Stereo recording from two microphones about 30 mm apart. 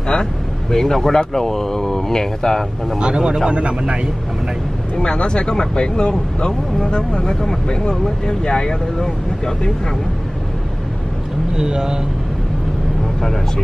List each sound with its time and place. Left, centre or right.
0.7 s speech: centre
3.0 s speech: right
4.9 s speech: left
11.5 s speech: right